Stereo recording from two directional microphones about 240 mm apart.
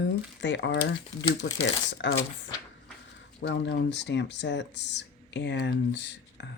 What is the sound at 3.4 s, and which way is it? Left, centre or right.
Speech, left.